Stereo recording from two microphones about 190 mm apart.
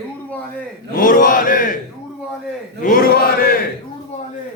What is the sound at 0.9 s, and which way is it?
Chant, 45° left (ahead or behind).